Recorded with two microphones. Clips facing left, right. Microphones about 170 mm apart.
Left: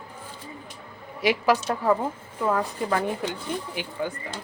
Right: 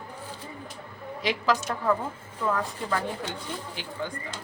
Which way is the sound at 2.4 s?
20° left (ahead or behind).